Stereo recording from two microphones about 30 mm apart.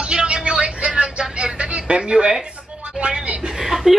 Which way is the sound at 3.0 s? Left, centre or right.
Right.